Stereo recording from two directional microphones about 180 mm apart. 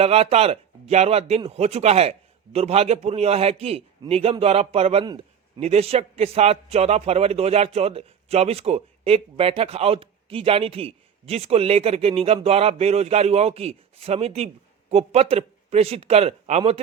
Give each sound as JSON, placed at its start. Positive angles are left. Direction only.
{"t": 0.0, "sound": "a man's voice", "side_deg": -35}